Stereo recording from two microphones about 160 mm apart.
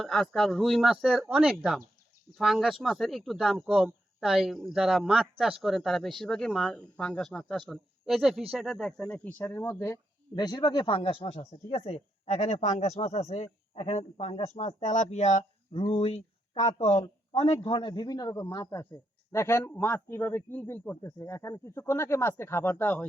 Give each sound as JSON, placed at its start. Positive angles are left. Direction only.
{"t": 0.0, "sound": "a man's voice", "side_deg": 0}